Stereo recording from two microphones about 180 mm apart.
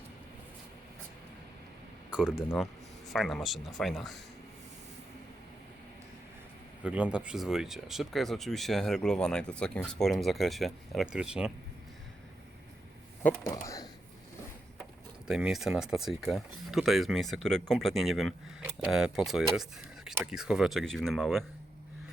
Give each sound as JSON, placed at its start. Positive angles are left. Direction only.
{"t": 2.0, "sound": "speech", "side_deg": -5}
{"t": 6.8, "sound": "speech", "side_deg": -5}
{"t": 13.2, "sound": "speech", "side_deg": 15}
{"t": 15.3, "sound": "speech", "side_deg": -5}